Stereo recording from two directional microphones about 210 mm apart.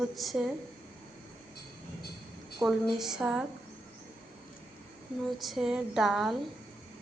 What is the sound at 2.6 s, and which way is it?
Speech, centre (ahead or behind).